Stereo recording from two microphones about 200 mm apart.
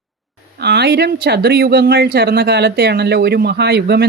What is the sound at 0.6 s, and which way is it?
Speech, 55° right (ahead or behind).